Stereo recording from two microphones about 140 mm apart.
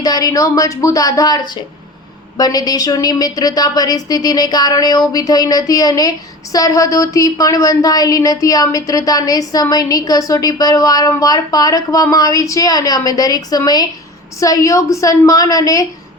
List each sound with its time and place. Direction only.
0.0 s a woman's voice: 30° left (ahead or behind)
2.4 s a woman's voice: 30° left (ahead or behind)